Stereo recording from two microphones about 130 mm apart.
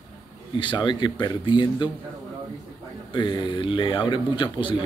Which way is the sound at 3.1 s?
40° left (ahead or behind).